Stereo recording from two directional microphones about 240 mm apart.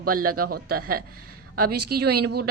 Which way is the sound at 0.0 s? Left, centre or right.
Right.